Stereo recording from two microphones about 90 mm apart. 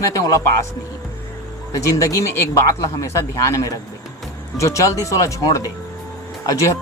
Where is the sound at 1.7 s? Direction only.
40° left (ahead or behind).